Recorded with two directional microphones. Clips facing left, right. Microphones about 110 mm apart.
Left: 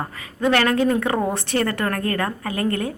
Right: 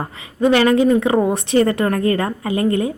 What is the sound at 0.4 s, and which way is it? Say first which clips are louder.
A woman's voice: right 5 dB; 15° right (ahead or behind).